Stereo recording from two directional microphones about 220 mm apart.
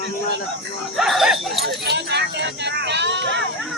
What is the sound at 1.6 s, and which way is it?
Speech, 50° right (ahead or behind).